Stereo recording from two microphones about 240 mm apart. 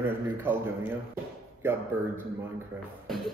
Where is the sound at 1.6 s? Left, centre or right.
Centre.